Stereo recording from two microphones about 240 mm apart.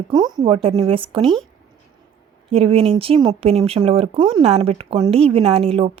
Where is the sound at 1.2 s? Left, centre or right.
Centre.